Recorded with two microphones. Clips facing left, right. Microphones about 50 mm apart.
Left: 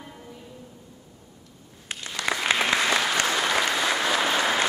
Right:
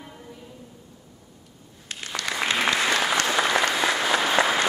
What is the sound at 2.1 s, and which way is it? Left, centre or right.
Applause, centre.